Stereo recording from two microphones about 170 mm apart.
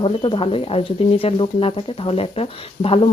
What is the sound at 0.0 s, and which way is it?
Speech, 30° left (ahead or behind).